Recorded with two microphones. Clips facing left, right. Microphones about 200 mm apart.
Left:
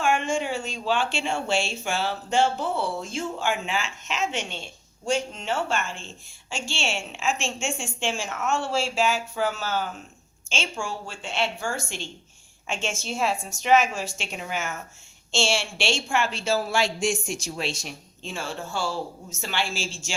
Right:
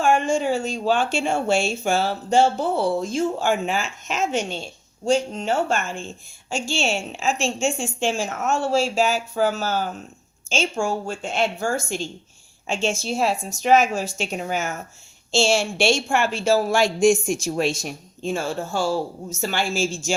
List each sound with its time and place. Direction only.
0.0 s a woman's voice: 35° right (ahead or behind)